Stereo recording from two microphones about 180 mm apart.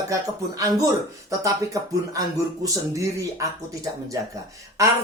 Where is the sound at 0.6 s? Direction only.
20° right (ahead or behind).